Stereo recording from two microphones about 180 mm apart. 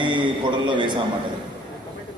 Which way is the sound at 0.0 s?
25° right (ahead or behind).